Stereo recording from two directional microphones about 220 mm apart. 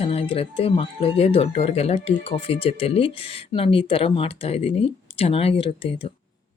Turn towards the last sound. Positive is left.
turn(degrees=25)  # may be behind; listen again after turning